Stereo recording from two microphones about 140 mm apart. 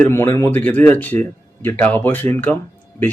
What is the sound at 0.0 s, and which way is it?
Speech, 15° left (ahead or behind).